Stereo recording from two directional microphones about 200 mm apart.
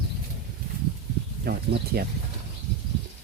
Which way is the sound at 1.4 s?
50° right (ahead or behind).